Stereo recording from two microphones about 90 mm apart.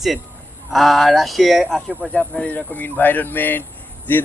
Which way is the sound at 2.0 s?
15° left (ahead or behind).